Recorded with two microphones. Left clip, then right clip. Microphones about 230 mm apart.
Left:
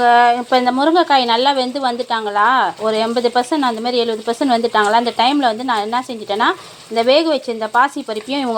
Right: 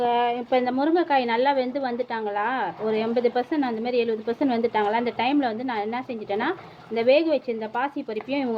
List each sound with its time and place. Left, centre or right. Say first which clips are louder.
0.0 s a woman's voice: left 11 dB; left